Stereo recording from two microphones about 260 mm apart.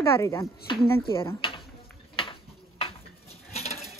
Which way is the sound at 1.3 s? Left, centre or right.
Centre.